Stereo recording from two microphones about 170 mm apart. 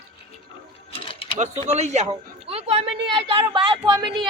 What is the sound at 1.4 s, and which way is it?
Speech, 40° right (ahead or behind).